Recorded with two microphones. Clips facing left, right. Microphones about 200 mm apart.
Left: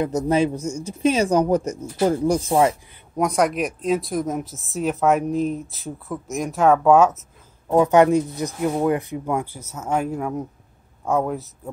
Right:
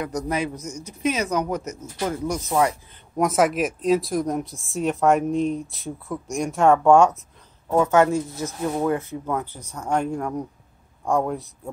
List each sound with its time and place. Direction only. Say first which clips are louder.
0.0 s speech: left 6 dB; 25° left (ahead or behind)
3.2 s speech: even; centre (ahead or behind)
7.6 s speech: left 3 dB; 15° left (ahead or behind); by 11.7 s centre (ahead or behind)